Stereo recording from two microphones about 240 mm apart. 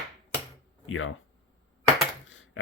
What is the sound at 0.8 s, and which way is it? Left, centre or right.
Speech, left.